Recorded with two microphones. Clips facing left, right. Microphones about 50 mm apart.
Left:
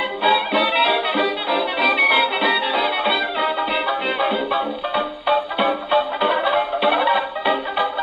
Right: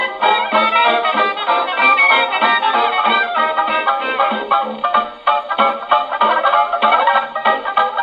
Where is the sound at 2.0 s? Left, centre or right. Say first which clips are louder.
Right 4 dB; right.